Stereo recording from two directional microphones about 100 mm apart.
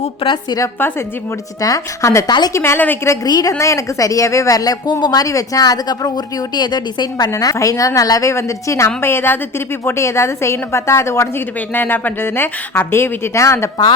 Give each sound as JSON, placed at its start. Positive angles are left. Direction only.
{"t": 0.0, "sound": "a woman's voice", "side_deg": 65}
{"t": 1.6, "sound": "a woman's voice", "side_deg": 35}
{"t": 3.2, "sound": "a woman's voice", "side_deg": 45}
{"t": 3.6, "sound": "a woman's voice", "side_deg": 30}